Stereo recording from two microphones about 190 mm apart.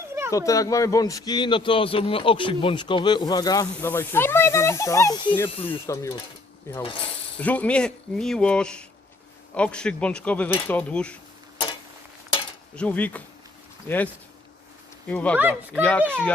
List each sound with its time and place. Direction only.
0.3 s a man's voice: 15° left (ahead or behind)
12.7 s speech: 5° left (ahead or behind)
15.4 s speech: 10° right (ahead or behind)
15.8 s speech: 5° left (ahead or behind)